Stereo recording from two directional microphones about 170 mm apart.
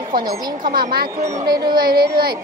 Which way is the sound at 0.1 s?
55° right (ahead or behind).